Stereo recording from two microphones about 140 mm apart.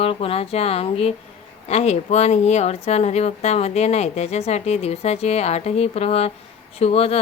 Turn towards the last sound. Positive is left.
turn(degrees=45)  # may be behind; listen again after turning